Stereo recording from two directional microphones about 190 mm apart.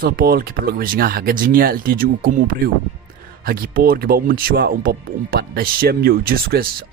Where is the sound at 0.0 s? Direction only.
50° right (ahead or behind).